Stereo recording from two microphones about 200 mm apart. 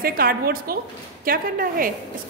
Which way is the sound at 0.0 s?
45° right (ahead or behind).